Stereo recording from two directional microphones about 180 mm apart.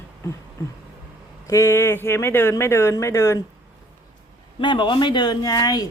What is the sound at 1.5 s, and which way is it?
A woman's voice, 15° left (ahead or behind).